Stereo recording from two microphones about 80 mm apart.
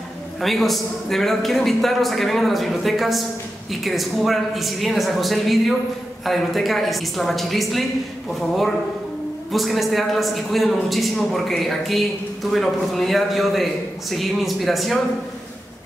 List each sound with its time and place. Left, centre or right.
0.4 s a man's voice: centre